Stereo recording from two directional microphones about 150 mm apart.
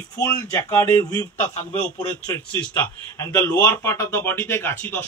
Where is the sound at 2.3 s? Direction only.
10° left (ahead or behind).